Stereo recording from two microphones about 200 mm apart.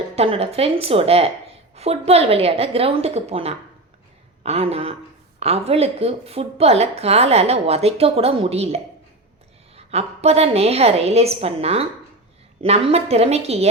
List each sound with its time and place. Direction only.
0.2 s a woman's voice: 30° right (ahead or behind)